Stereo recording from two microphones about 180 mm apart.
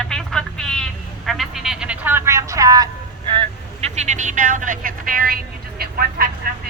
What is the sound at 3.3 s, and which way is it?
Vehicle, 30° right (ahead or behind).